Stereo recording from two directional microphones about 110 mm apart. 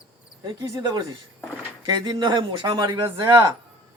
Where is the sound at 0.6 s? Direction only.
30° right (ahead or behind).